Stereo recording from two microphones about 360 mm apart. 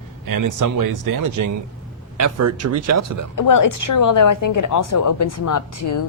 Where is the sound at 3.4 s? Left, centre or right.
Left.